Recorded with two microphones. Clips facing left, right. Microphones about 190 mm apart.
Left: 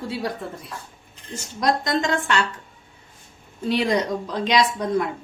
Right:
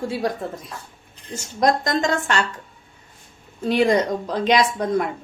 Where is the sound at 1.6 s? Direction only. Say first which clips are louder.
Right 2 dB; 45° right (ahead or behind).